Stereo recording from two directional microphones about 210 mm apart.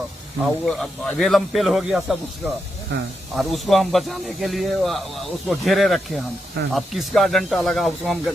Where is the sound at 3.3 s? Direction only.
Centre (ahead or behind).